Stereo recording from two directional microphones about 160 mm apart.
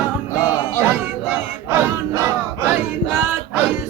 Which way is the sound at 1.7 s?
20° right (ahead or behind).